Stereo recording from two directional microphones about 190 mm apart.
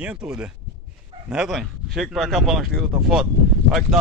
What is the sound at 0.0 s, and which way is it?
Speech, 5° right (ahead or behind).